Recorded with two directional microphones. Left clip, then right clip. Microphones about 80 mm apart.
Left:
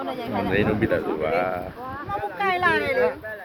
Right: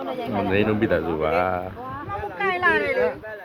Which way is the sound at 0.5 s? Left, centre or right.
Right.